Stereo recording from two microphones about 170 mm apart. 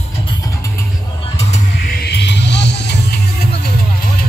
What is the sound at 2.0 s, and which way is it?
Music, 80° left.